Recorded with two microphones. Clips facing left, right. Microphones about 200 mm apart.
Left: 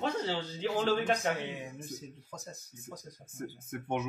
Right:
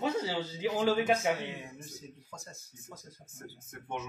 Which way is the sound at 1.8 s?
20° left (ahead or behind).